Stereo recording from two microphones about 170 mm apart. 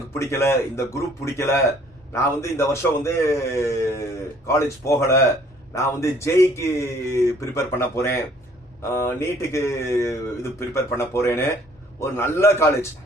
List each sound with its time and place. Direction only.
0.1 s speech: 15° left (ahead or behind)